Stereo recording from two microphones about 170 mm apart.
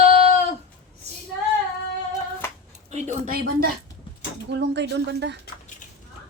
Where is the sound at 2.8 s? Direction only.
40° right (ahead or behind).